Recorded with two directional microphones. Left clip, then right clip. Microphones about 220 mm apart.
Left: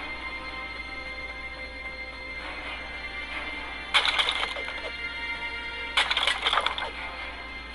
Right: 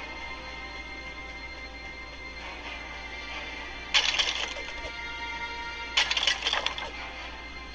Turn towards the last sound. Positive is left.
turn(degrees=0)  # may be behind; listen again after turning